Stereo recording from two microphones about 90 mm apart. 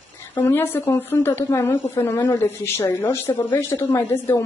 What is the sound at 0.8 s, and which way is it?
A woman's voice, 25° left (ahead or behind).